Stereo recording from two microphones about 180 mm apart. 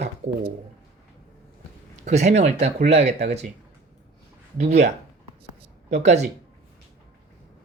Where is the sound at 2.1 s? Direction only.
40° right (ahead or behind).